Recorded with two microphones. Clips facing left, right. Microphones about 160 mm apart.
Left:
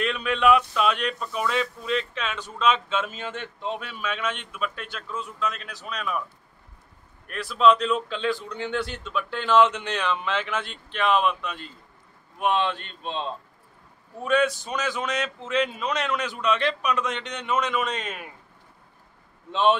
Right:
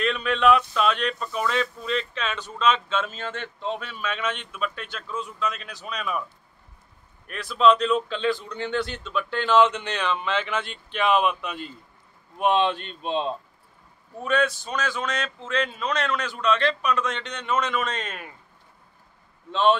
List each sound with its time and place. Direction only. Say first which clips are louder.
0.0 s speech: right 1 dB; 5° left (ahead or behind)
7.2 s speech: even; 5° left (ahead or behind)
12.4 s speech: right 3 dB; 20° right (ahead or behind)
14.2 s speech: left 1 dB; 10° left (ahead or behind)
19.5 s speech: right 1 dB; 15° left (ahead or behind)